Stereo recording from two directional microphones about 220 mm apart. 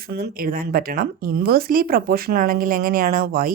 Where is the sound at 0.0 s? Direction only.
45° right (ahead or behind).